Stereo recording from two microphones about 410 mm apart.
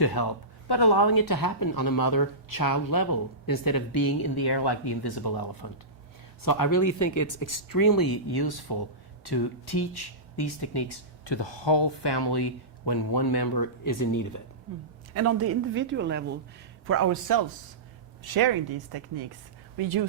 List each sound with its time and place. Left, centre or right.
0.0 s speech: left
15.1 s a man's voice: right
18.2 s speech: right